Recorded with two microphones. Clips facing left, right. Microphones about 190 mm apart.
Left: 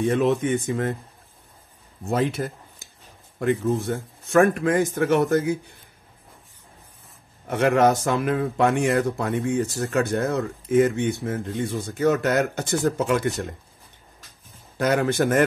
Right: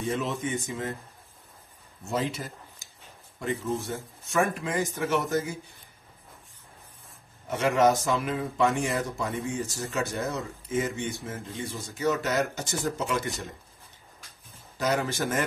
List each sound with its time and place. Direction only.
0.1 s speech: 60° left (ahead or behind)
2.0 s speech: 60° left (ahead or behind)
7.4 s speech: 55° left (ahead or behind)
14.8 s speech: 55° left (ahead or behind)